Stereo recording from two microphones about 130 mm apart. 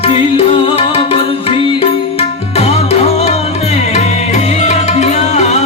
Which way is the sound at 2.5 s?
50° left (ahead or behind).